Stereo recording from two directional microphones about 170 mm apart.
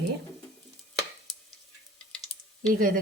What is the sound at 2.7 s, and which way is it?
Speech, 50° right (ahead or behind).